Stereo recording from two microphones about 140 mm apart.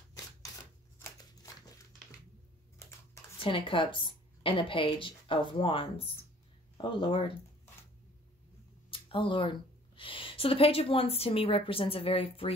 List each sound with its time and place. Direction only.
1.5 s crumpling: 25° left (ahead or behind)
3.3 s a woman's voice: 40° left (ahead or behind)
8.9 s speech: 35° left (ahead or behind)